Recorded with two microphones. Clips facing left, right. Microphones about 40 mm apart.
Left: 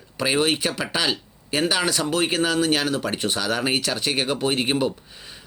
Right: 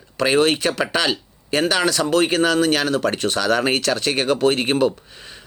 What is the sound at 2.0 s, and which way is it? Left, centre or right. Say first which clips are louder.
Speech: right 5 dB; right.